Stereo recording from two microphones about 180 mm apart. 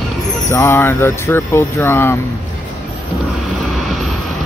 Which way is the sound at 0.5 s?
15° left (ahead or behind).